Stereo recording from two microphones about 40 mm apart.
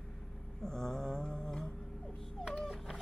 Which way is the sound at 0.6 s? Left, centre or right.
Centre.